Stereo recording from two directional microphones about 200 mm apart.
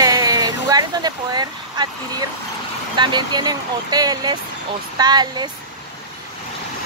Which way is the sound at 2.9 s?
20° right (ahead or behind).